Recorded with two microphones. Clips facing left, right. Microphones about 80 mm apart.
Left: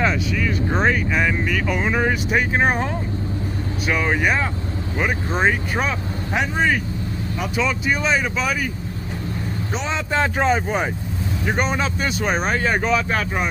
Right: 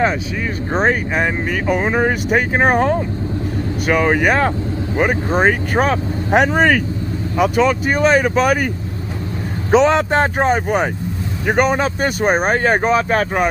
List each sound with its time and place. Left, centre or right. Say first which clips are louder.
0.0 s speech: right 3 dB; right
7.3 s speech: right 9 dB; right
9.7 s speech: right 14 dB; right